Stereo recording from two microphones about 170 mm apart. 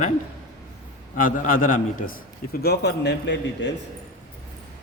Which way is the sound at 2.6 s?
75° left (ahead or behind).